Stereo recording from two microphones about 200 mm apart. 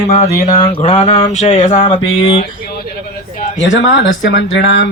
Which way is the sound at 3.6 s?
70° left (ahead or behind).